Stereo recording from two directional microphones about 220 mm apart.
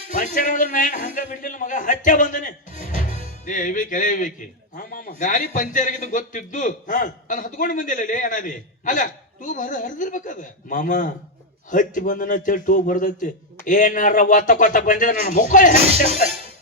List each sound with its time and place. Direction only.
0.1 s a man's voice: 35° left (ahead or behind)
3.1 s music: 25° right (ahead or behind)
3.4 s a man's voice: 35° left (ahead or behind)